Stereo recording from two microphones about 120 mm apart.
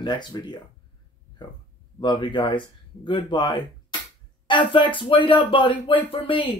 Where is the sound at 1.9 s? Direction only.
40° left (ahead or behind).